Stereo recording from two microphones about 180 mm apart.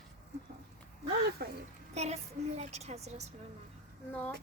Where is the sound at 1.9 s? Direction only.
35° right (ahead or behind).